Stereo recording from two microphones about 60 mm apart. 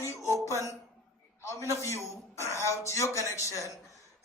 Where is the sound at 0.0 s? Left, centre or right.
Left.